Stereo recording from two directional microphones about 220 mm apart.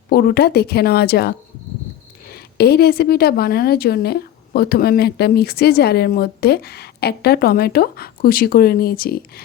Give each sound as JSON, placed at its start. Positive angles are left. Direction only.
{"t": 0.1, "sound": "a woman's voice", "side_deg": 45}